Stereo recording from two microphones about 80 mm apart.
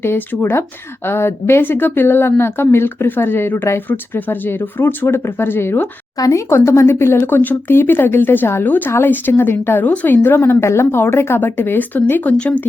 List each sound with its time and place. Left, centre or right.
0.0 s speech: left
6.1 s speech: left
6.5 s speech: left